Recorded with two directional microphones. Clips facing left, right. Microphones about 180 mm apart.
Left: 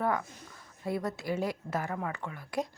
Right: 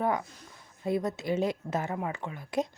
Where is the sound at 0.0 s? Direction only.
20° right (ahead or behind).